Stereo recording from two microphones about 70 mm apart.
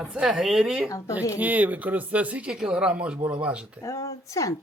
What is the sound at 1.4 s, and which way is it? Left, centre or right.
Speech, right.